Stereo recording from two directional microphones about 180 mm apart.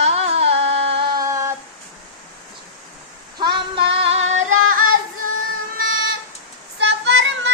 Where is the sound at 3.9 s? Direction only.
30° right (ahead or behind).